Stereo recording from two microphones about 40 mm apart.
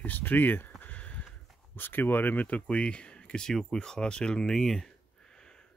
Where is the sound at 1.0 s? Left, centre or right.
Left.